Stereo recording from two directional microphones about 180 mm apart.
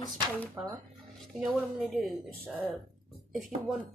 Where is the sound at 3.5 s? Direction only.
45° right (ahead or behind).